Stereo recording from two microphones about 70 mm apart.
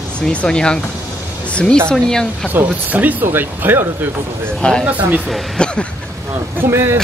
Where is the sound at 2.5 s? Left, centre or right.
Right.